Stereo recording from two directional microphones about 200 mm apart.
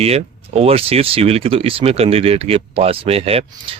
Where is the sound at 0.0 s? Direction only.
30° right (ahead or behind).